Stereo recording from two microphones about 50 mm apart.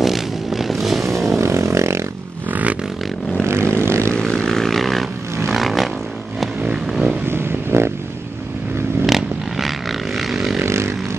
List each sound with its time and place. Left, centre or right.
0.0 s vehicle: centre
1.0 s vehicle: right
1.4 s vehicle: right
2.5 s music: right
3.7 s vehicle: right
4.1 s vehicle: centre
6.6 s vehicle: centre
7.2 s a sound: right
9.0 s a sound: centre
10.6 s vehicle: right